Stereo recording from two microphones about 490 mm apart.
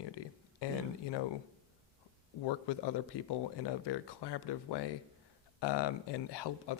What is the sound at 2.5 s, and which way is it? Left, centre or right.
A man's voice, left.